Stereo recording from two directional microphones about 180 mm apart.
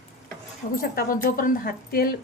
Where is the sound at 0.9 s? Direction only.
50° left (ahead or behind).